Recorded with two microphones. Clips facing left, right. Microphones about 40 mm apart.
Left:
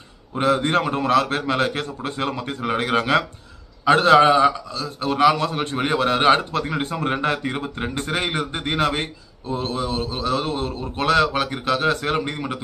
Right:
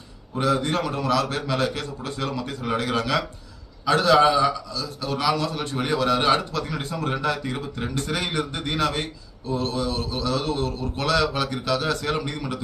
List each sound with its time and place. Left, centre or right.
0.4 s a man's voice: left